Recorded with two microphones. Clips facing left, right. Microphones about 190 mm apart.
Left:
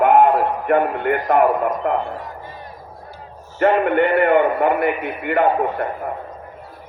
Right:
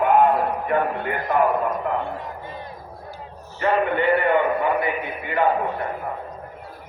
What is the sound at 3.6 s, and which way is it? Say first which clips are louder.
A man's voice: left 5 dB; 55° left (ahead or behind).